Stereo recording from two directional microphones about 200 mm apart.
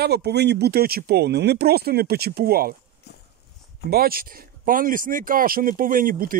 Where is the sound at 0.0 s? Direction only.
55° right (ahead or behind).